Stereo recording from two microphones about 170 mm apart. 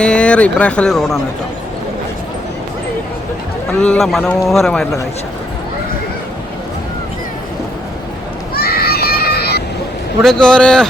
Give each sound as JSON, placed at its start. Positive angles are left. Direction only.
{"t": 0.0, "sound": "speech", "side_deg": 5}
{"t": 3.8, "sound": "a man's voice", "side_deg": 5}
{"t": 8.5, "sound": "a sound", "side_deg": 65}
{"t": 10.2, "sound": "a man's voice", "side_deg": 5}